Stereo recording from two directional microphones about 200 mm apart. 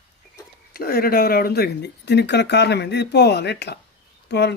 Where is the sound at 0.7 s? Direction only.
50° left (ahead or behind).